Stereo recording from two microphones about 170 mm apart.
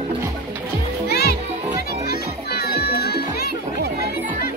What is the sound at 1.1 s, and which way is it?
Music, 65° left (ahead or behind).